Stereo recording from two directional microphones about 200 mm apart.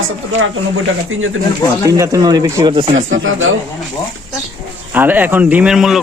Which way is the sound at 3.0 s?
80° right.